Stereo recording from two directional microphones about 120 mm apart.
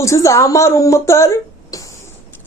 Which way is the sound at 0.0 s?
25° left (ahead or behind).